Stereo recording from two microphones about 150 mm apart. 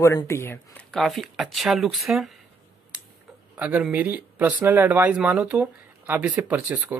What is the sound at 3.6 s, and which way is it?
Speech, 10° right (ahead or behind).